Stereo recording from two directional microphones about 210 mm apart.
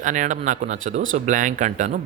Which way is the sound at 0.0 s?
35° right (ahead or behind).